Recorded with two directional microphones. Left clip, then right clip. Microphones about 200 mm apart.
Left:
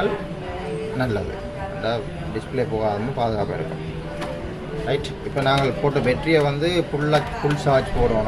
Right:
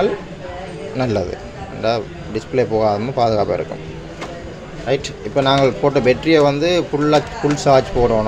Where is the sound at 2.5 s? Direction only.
45° right (ahead or behind).